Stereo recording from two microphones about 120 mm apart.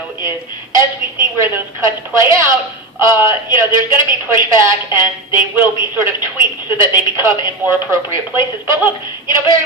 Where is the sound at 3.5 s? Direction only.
25° right (ahead or behind).